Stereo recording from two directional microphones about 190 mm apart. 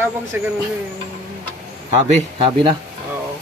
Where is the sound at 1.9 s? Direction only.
25° right (ahead or behind).